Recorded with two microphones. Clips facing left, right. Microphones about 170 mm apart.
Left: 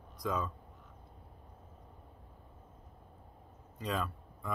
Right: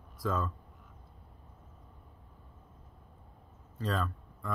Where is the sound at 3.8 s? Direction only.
5° left (ahead or behind).